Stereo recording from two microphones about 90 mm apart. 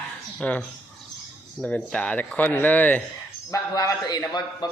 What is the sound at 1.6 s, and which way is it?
Speech, 10° left (ahead or behind).